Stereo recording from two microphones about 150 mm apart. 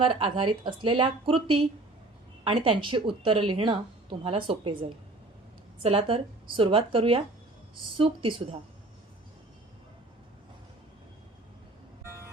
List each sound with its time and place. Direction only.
0.1 s speech: 35° right (ahead or behind)